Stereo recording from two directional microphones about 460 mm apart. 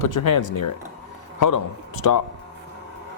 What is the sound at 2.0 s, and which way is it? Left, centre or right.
Speech, left.